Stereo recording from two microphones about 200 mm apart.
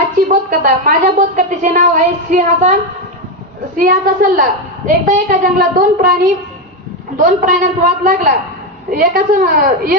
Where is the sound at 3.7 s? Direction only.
45° right (ahead or behind).